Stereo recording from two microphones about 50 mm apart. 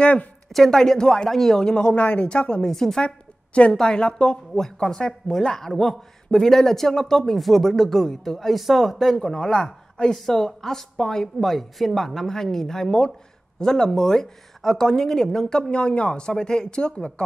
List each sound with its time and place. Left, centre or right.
0.0 s speech: left
0.5 s a man's voice: centre
2.7 s a man's voice: centre
3.7 s speech: centre
4.6 s a man's voice: centre
15.7 s speech: left